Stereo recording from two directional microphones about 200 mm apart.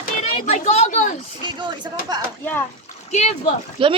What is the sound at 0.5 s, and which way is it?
Speech, 30° left (ahead or behind).